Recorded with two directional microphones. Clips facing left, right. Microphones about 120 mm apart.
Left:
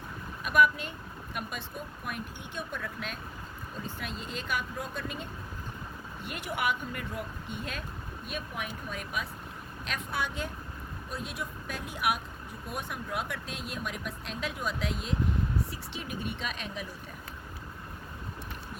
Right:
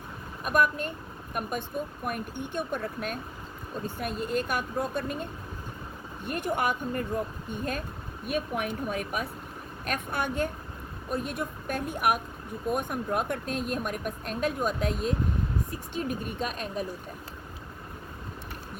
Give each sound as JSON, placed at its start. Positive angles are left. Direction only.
{"t": 0.4, "sound": "a woman's voice", "side_deg": -45}
{"t": 3.8, "sound": "a woman's voice", "side_deg": -55}
{"t": 6.2, "sound": "a woman's voice", "side_deg": -50}
{"t": 8.3, "sound": "a woman's voice", "side_deg": -55}